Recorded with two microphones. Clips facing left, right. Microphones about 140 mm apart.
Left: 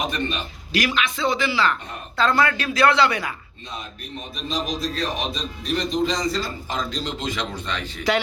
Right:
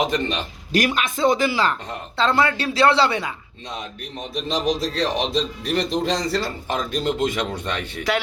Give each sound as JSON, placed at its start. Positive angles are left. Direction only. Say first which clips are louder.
{"t": 0.1, "sound": "a man's voice", "louder": "right 3 dB", "side_deg": -90}
{"t": 0.7, "sound": "speech", "louder": "right 2 dB", "side_deg": -45}
{"t": 2.1, "sound": "speech", "louder": "right 1 dB", "side_deg": -25}
{"t": 4.4, "sound": "a man's voice", "louder": "right 4 dB", "side_deg": -85}